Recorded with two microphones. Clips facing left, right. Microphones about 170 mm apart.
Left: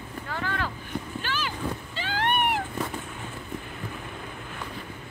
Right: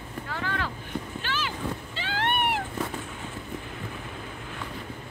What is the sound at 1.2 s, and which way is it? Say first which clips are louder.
Boat: even; 45° left (ahead or behind).